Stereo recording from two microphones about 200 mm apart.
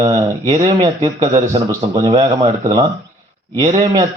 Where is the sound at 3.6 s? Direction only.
30° right (ahead or behind).